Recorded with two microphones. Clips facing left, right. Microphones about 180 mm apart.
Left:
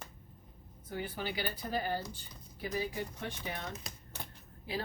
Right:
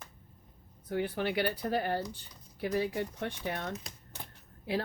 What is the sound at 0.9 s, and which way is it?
Speech, 65° right (ahead or behind).